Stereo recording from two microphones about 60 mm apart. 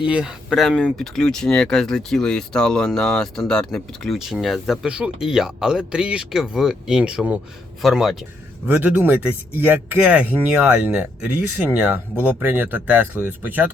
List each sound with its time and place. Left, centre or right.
0.0 s speech: centre
0.8 s speech: centre
4.2 s speech: centre
4.9 s speech: centre
5.2 s speech: centre
8.6 s speech: right
10.0 s speech: right